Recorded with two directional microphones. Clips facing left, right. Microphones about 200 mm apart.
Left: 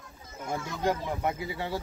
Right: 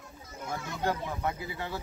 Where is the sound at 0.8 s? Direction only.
15° left (ahead or behind).